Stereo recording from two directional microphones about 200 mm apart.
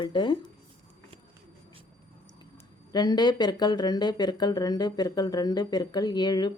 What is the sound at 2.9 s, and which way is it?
Speech, 20° left (ahead or behind).